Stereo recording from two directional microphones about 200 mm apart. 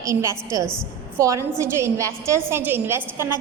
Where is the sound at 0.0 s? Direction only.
15° right (ahead or behind).